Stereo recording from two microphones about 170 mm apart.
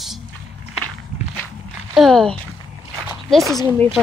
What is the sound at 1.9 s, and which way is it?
A woman's voice, centre (ahead or behind).